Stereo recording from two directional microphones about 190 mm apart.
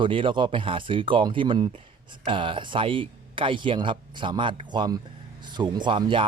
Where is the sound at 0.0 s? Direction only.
25° right (ahead or behind).